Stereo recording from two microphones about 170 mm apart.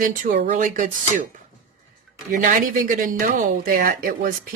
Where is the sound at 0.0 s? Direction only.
50° right (ahead or behind).